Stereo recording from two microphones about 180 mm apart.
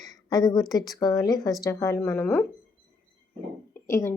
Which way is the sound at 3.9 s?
15° left (ahead or behind).